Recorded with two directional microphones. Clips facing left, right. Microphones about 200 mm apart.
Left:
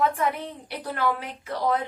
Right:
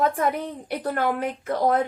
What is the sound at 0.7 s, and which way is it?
Speech, 50° right (ahead or behind).